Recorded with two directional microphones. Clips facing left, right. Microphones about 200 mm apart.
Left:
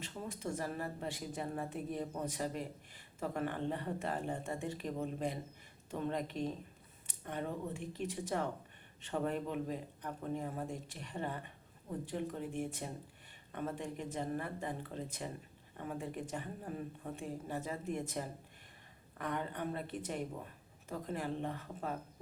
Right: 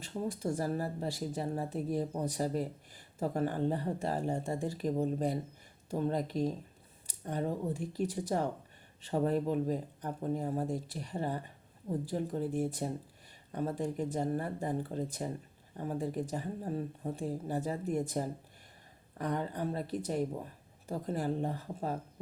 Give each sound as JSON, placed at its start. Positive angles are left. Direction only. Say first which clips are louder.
{"t": 0.0, "sound": "speech", "louder": "right 7 dB", "side_deg": -35}